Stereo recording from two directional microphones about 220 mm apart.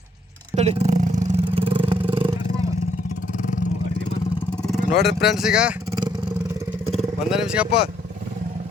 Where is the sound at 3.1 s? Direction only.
35° left (ahead or behind).